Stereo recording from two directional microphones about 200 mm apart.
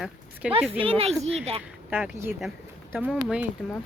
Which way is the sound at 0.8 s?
30° right (ahead or behind).